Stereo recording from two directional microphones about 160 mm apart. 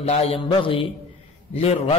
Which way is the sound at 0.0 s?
40° left (ahead or behind).